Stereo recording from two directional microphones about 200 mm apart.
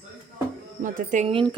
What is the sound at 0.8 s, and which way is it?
Speech, 40° right (ahead or behind).